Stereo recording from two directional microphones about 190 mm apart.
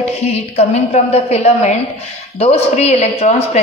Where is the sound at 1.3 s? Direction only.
35° left (ahead or behind).